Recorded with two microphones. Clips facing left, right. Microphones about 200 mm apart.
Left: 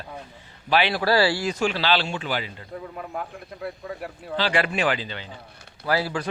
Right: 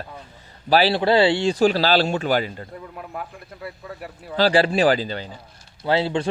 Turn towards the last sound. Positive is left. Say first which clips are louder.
# right 4 dB
turn(degrees=-25)  # may be behind; listen again after turning